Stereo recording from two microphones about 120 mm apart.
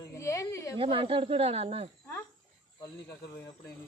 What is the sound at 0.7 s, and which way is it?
Speech, 50° right (ahead or behind).